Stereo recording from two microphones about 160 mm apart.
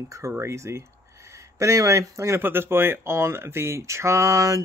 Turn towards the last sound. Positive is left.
turn(degrees=-20)  # may be behind; listen again after turning